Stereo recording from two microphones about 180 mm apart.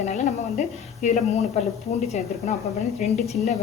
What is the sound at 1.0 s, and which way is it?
Speech, 40° left (ahead or behind).